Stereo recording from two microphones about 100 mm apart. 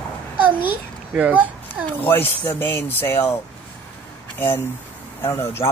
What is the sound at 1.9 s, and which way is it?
Speech, 20° left (ahead or behind).